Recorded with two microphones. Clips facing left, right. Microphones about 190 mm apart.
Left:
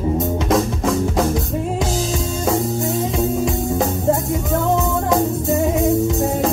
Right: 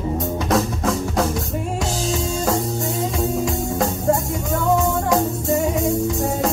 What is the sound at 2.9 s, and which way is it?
Music, 20° left (ahead or behind).